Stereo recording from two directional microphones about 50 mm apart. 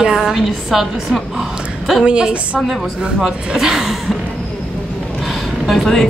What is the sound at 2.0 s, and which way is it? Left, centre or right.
Speech, centre.